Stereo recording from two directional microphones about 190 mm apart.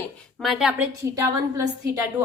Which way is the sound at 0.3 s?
Centre (ahead or behind).